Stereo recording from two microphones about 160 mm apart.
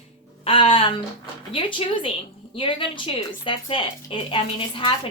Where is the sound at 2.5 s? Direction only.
35° left (ahead or behind).